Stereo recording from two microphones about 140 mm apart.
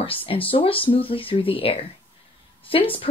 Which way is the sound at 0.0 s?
40° left (ahead or behind).